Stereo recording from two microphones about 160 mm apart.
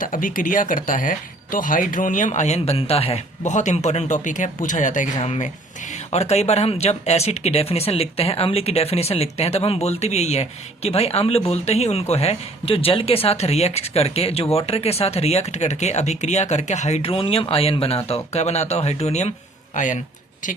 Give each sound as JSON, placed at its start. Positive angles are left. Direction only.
{"t": 0.0, "sound": "speech", "side_deg": 60}